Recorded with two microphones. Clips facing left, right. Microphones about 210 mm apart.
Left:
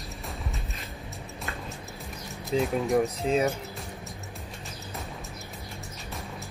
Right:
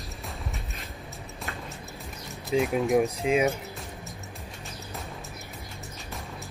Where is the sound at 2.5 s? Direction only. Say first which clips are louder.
Right 1 dB; 10° right (ahead or behind).